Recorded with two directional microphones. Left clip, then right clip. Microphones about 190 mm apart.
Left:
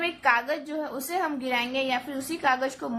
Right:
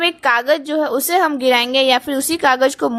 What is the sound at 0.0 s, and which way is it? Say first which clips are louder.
A woman's voice: right 8 dB; 50° right (ahead or behind).